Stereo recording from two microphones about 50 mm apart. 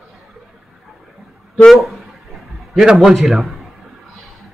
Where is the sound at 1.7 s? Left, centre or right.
Centre.